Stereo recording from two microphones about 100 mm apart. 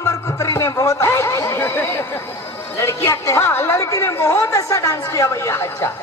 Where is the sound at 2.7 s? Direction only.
30° left (ahead or behind).